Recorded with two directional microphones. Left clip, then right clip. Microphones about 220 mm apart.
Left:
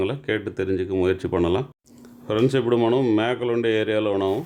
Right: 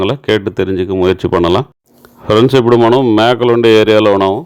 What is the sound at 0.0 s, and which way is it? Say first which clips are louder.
Speech: right 12 dB; 30° right (ahead or behind).